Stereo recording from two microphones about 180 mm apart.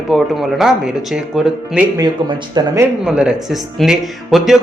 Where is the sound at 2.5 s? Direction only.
20° right (ahead or behind).